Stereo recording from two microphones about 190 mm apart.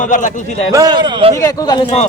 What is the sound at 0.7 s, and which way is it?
Speech, 20° right (ahead or behind).